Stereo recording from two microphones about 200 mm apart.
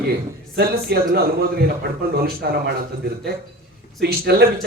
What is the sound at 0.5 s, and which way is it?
A man's voice, 55° right (ahead or behind).